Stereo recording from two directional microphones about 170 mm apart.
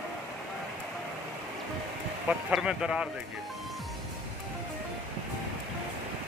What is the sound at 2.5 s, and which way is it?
Speech, 5° right (ahead or behind).